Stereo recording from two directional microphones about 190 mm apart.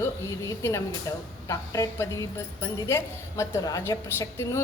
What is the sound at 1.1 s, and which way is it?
A woman's voice, 20° left (ahead or behind).